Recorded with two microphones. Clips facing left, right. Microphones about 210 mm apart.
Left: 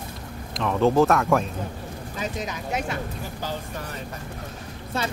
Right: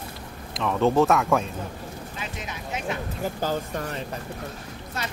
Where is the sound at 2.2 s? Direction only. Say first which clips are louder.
Left 8 dB; 40° left (ahead or behind).